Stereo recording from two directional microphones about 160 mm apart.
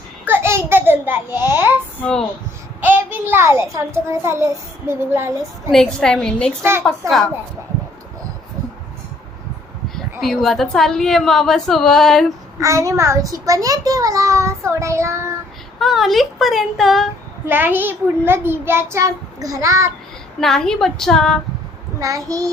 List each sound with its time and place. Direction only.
0.3 s a sound: 15° right (ahead or behind)
2.0 s speech: 10° left (ahead or behind)
2.8 s a child's voice: 10° right (ahead or behind)
5.7 s a woman's voice: 5° left (ahead or behind)
6.6 s a child's voice: 15° right (ahead or behind)
9.9 s a woman's voice: centre (ahead or behind)
12.5 s a child's voice: 20° right (ahead or behind)
15.8 s a woman's voice: centre (ahead or behind)
17.4 s a child's voice: 15° right (ahead or behind)
20.4 s a woman's voice: 5° left (ahead or behind)
21.9 s a child's voice: 20° right (ahead or behind)